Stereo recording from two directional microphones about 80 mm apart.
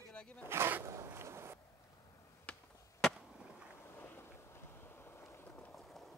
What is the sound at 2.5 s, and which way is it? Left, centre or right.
Chop, centre.